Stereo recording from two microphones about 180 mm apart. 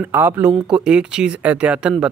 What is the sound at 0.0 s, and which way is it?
Speech, 10° right (ahead or behind).